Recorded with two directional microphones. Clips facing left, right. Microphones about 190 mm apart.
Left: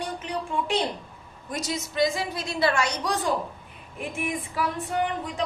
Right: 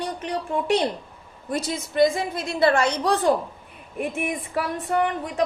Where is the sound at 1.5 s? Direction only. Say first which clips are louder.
Right 5 dB; 55° right (ahead or behind).